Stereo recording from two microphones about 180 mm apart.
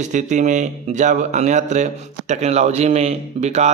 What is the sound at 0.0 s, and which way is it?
Speech, 40° right (ahead or behind).